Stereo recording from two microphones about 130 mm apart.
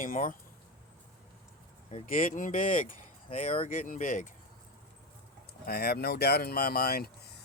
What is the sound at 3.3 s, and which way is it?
Speech, 60° left (ahead or behind).